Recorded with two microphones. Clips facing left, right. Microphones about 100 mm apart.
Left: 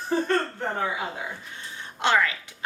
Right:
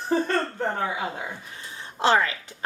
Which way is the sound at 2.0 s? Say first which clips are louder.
Right 2 dB; 30° right (ahead or behind).